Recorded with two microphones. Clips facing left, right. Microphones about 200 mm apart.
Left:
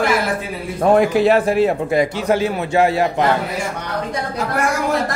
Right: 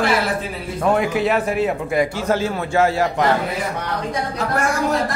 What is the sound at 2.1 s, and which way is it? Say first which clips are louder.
A man's voice: left 2 dB; 15° left (ahead or behind).